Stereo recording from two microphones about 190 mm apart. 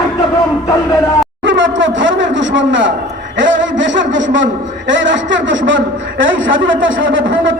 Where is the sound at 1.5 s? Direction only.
75° right (ahead or behind).